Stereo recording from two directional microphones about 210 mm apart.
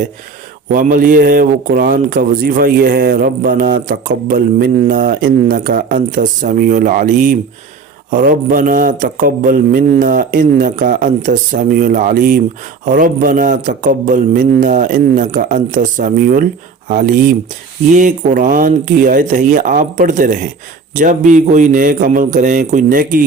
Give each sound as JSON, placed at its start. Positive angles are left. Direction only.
{"t": 0.7, "sound": "a man's voice", "side_deg": -40}